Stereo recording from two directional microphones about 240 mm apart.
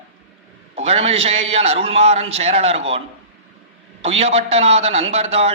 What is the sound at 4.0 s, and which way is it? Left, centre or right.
A man's voice, right.